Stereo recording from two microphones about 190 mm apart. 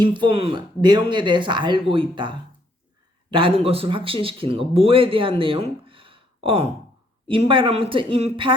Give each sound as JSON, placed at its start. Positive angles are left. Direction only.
{"t": 0.0, "sound": "speech", "side_deg": -25}